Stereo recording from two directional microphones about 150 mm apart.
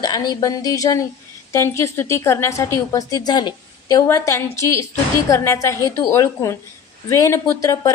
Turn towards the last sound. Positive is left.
turn(degrees=20)  # may be behind; listen again after turning